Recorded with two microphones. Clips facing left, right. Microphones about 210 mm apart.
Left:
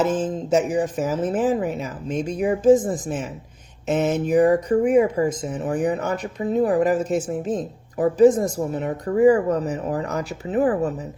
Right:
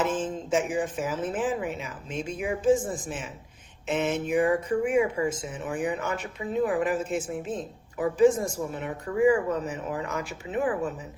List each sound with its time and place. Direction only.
0.0 s speech: 40° left (ahead or behind)